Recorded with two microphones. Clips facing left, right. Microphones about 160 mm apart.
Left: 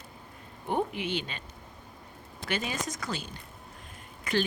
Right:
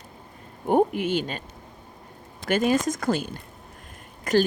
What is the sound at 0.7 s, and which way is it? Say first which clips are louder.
Speech: right 9 dB; 50° right (ahead or behind).